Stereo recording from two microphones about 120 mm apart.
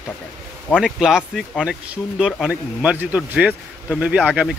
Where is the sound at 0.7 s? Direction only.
5° right (ahead or behind).